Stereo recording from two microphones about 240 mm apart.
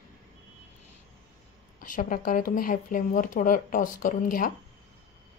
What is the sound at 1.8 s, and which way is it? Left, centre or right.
A woman's voice, left.